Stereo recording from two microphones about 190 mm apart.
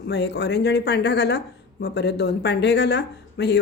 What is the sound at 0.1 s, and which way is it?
Speech, 60° left (ahead or behind).